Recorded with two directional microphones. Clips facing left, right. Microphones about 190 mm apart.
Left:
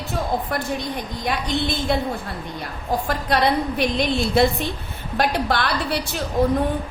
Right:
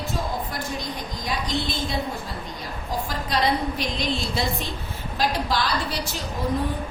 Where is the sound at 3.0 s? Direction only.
60° left (ahead or behind).